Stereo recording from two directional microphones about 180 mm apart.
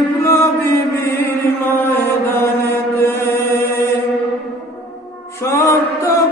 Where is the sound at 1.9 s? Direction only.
15° left (ahead or behind).